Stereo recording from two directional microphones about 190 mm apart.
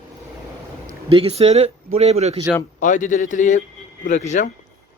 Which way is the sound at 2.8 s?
40° left (ahead or behind).